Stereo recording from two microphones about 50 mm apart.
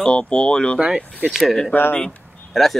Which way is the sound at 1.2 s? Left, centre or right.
Centre.